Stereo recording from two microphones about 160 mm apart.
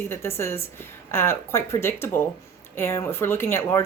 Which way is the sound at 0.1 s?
15° left (ahead or behind).